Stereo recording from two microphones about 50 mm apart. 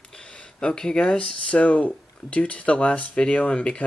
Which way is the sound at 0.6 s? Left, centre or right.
Centre.